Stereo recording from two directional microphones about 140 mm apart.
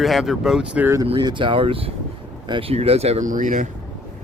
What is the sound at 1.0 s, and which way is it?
Speech, 35° right (ahead or behind).